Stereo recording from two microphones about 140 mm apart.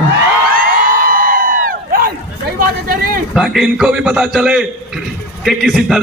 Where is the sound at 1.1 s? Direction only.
90° right.